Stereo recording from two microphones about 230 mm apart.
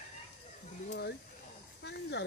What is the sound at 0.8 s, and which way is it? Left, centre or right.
Speech, left.